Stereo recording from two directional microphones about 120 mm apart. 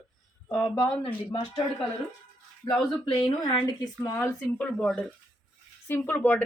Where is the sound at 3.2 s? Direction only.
40° left (ahead or behind).